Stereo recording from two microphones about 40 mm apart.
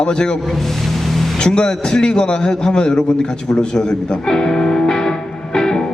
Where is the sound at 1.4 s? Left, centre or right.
Left.